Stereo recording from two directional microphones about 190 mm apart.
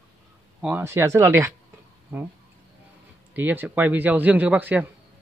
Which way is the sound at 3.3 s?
10° right (ahead or behind).